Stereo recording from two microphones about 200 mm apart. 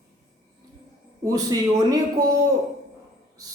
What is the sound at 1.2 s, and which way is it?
A man's voice, 15° right (ahead or behind).